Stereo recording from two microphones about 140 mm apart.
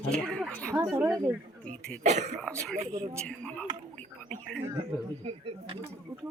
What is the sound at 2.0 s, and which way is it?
Speech, 55° right (ahead or behind).